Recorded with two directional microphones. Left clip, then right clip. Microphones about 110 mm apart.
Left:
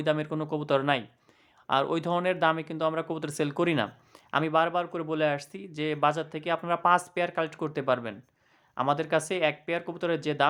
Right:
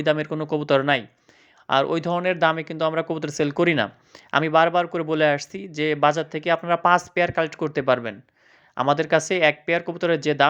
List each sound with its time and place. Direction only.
0.0 s speech: 30° right (ahead or behind)